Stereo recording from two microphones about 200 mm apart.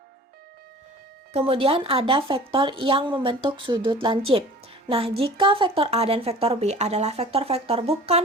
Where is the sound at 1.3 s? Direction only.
30° right (ahead or behind).